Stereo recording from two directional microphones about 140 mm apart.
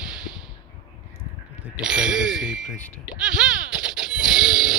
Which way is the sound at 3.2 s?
5° right (ahead or behind).